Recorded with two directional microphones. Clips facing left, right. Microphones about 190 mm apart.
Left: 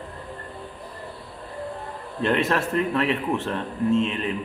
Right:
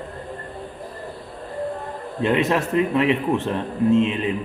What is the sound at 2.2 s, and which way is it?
A man's voice, 15° right (ahead or behind).